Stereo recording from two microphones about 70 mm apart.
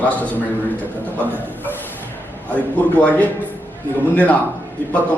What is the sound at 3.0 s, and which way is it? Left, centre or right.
A man's voice, left.